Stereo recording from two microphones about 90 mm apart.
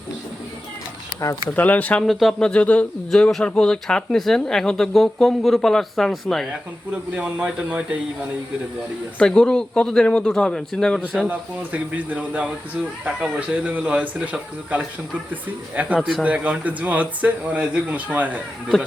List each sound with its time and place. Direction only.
1.5 s speech: 20° left (ahead or behind)
2.0 s speech: centre (ahead or behind)
2.5 s speech: 15° left (ahead or behind)
7.1 s speech: 15° right (ahead or behind)
9.1 s speech: 10° left (ahead or behind)
11.3 s speech: 20° right (ahead or behind)
16.0 s speech: centre (ahead or behind)
16.2 s speech: 15° right (ahead or behind)